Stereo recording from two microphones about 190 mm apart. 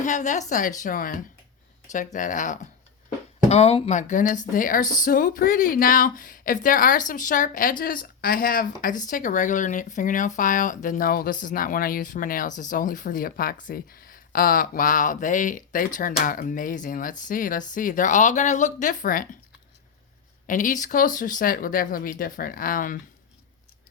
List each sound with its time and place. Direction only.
0.0 s speech: 40° left (ahead or behind)
20.5 s speech: 45° left (ahead or behind)